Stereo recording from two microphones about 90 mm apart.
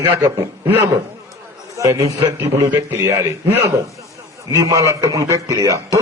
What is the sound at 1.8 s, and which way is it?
Speech, 35° right (ahead or behind).